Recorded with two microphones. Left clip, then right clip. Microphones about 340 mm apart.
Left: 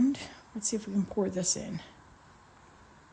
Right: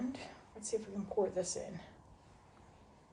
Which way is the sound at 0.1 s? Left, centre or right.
Left.